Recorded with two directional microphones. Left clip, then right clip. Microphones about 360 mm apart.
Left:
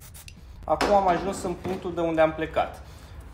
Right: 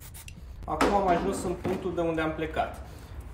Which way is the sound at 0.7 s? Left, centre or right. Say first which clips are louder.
Left 4 dB; centre.